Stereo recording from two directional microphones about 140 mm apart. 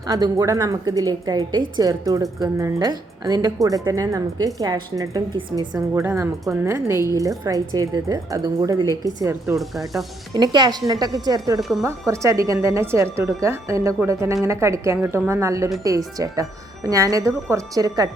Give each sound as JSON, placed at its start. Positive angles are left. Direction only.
{"t": 0.0, "sound": "speech", "side_deg": -25}